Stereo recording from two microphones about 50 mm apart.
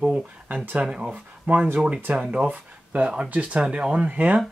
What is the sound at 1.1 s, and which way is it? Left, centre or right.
Speech, right.